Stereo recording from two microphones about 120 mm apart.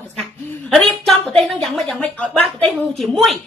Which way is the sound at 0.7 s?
5° left (ahead or behind).